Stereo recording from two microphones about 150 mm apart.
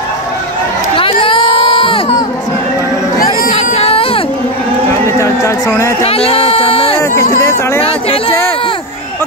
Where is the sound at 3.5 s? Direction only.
40° left (ahead or behind).